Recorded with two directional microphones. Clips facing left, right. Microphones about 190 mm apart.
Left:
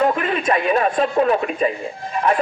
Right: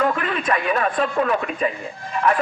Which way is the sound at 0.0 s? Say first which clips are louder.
Left 3 dB; 25° left (ahead or behind).